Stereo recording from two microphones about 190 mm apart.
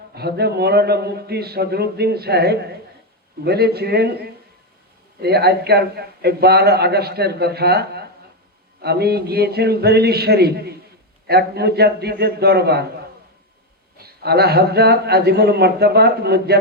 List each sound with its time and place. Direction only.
0.1 s a man's voice: 60° right (ahead or behind)
14.0 s a man's voice: 55° right (ahead or behind)